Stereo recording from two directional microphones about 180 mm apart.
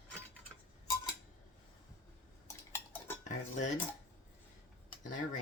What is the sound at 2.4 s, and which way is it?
Cutlery, 15° left (ahead or behind).